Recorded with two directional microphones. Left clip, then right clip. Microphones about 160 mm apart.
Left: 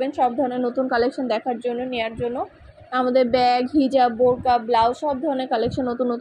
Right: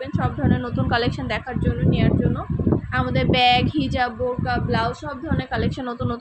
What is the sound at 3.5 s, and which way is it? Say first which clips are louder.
Speech: right 1 dB; 5° right (ahead or behind).